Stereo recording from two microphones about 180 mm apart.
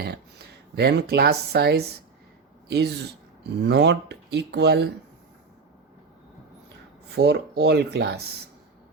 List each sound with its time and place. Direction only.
0.0 s speech: 65° right (ahead or behind)
7.2 s speech: 65° right (ahead or behind)